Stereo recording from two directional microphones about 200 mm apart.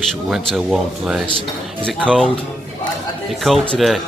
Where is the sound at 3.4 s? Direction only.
5° left (ahead or behind).